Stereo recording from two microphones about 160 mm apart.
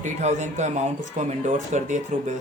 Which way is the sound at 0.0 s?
45° right (ahead or behind).